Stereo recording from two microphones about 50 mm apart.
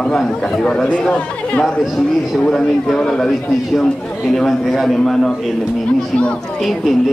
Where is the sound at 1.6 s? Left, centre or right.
Centre.